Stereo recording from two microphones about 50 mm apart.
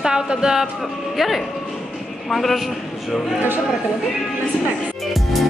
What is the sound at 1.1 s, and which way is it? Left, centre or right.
A man's voice, centre.